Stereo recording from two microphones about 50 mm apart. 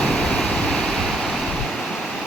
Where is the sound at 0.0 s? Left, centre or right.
Centre.